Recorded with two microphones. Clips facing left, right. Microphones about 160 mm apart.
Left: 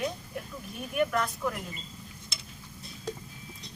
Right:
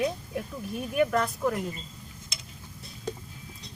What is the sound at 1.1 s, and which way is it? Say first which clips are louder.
Speech: right 4 dB; 35° right (ahead or behind).